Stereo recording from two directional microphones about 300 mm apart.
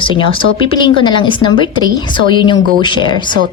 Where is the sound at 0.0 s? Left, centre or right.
Centre.